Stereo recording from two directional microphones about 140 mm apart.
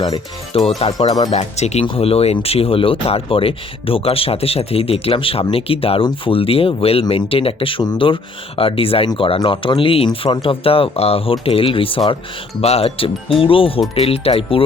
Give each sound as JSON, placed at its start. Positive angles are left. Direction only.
{"t": 0.0, "sound": "speech", "side_deg": 40}
{"t": 1.3, "sound": "speech", "side_deg": 50}
{"t": 1.8, "sound": "speech", "side_deg": 40}